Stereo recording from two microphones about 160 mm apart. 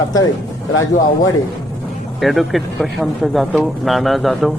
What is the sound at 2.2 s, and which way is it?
Speech, centre (ahead or behind).